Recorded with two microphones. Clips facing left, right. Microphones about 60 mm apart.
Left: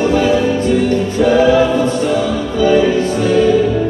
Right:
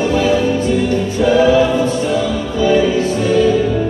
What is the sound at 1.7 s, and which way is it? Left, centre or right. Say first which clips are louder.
Music: left 1 dB; left.